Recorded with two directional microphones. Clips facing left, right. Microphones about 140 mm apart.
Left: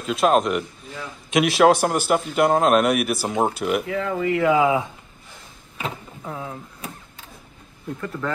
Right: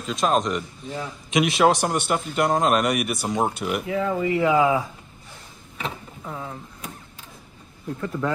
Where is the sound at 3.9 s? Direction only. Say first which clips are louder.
Even; 10° right (ahead or behind).